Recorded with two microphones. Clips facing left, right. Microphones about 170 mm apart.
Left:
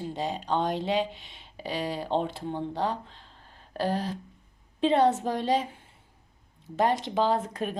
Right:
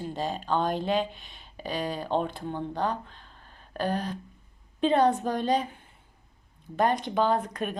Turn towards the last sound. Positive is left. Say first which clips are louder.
# even
turn(degrees=30)  # may be behind; listen again after turning